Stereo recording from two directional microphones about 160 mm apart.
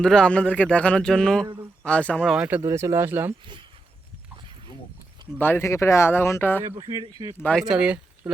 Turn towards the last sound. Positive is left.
turn(degrees=-5)  # may be behind; listen again after turning